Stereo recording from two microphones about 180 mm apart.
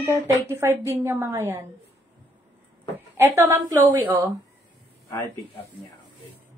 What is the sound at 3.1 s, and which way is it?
A woman's voice, 15° right (ahead or behind).